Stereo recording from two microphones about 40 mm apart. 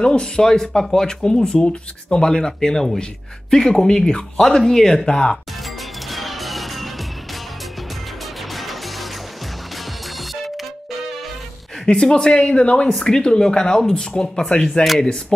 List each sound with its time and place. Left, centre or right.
0.0 s speech: left
6.0 s music: centre
8.5 s music: centre
10.1 s music: centre
11.9 s speech: left